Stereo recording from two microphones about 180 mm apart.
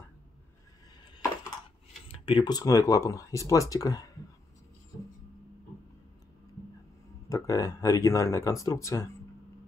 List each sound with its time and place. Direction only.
2.2 s speech: 25° left (ahead or behind)
7.2 s speech: 20° left (ahead or behind)